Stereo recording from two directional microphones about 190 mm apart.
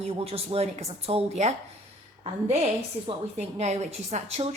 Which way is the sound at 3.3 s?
35° right (ahead or behind).